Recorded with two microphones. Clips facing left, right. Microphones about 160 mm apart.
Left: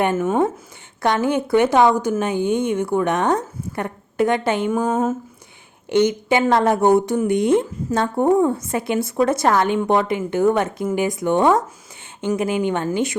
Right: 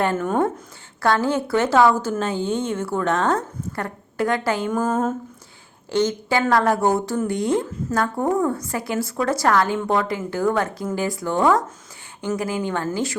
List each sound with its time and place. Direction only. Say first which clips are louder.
0.0 s speech: left 2 dB; 15° left (ahead or behind)
0.3 s speech: left 2 dB; 5° left (ahead or behind)
1.0 s a woman's voice: left 1 dB; 20° left (ahead or behind)
4.9 s speech: even; 10° left (ahead or behind)
5.9 s a woman's voice: left 4 dB; 20° left (ahead or behind)